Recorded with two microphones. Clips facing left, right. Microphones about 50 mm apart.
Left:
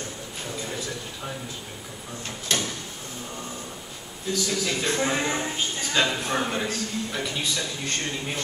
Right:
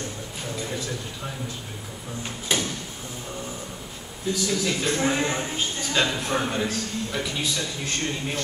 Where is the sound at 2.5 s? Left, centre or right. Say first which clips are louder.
Right 1 dB; centre.